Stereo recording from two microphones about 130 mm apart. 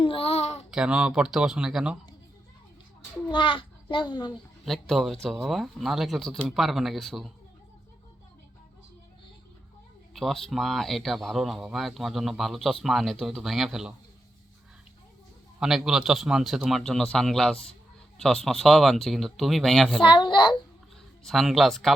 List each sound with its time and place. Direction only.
0.0 s babbling: 45° left (ahead or behind)
0.7 s speech: 5° right (ahead or behind)
3.2 s a child's voice: 40° left (ahead or behind)
4.6 s speech: centre (ahead or behind)
10.2 s speech: centre (ahead or behind)
15.6 s speech: 5° right (ahead or behind)
20.0 s a child's voice: 40° left (ahead or behind)
21.2 s speech: centre (ahead or behind)